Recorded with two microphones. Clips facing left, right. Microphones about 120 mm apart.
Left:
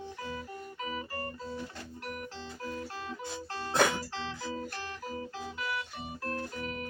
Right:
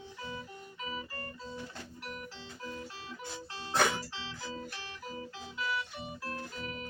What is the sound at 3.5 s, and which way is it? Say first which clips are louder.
Music: left 2 dB; 50° left (ahead or behind).